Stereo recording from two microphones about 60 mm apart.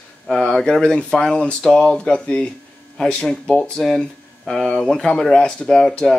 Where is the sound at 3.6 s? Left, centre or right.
Centre.